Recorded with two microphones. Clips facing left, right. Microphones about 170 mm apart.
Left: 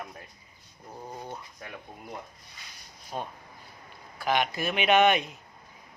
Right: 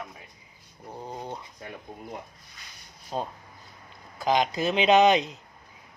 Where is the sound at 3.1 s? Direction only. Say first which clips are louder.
Right 4 dB; 25° right (ahead or behind).